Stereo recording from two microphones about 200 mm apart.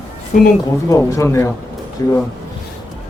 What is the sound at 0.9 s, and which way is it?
Speech, 15° left (ahead or behind).